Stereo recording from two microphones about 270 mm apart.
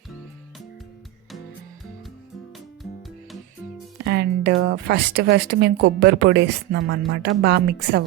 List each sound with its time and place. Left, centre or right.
4.0 s speech: right